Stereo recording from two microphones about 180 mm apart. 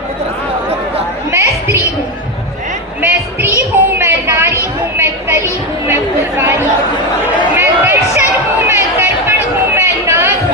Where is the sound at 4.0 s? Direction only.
15° right (ahead or behind).